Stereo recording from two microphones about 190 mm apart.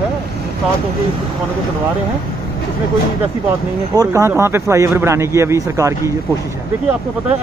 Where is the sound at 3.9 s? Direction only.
15° right (ahead or behind).